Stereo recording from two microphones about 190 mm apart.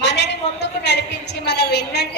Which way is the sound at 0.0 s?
65° left (ahead or behind).